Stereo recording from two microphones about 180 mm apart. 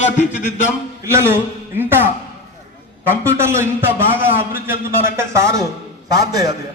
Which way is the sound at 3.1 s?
15° right (ahead or behind).